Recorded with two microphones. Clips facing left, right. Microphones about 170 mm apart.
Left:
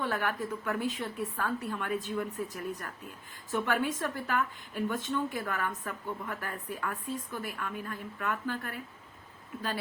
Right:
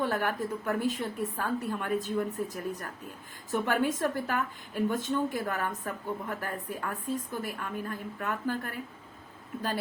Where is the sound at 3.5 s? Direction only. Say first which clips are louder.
Right 2 dB; 45° right (ahead or behind).